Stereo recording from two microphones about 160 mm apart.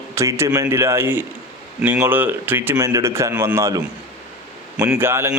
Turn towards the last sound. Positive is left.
turn(degrees=-15)  # may be behind; listen again after turning